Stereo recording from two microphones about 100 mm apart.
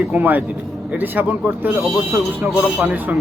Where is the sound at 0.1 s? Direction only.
20° right (ahead or behind).